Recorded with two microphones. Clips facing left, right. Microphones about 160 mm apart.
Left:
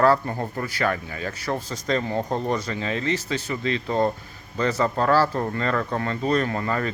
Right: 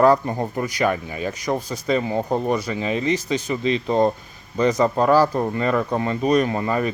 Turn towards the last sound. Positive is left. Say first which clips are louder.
# right 4 dB
turn(degrees=-15)  # may be behind; listen again after turning